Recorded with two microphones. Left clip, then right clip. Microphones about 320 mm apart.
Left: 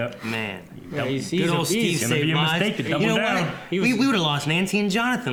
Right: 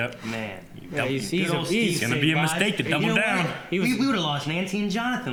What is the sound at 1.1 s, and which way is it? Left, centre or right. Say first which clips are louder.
Speech: left 4 dB; left.